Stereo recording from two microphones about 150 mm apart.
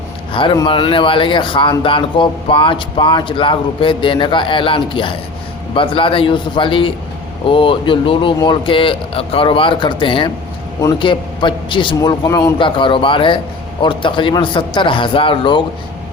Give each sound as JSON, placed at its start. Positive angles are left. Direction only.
{"t": 0.3, "sound": "speech", "side_deg": 30}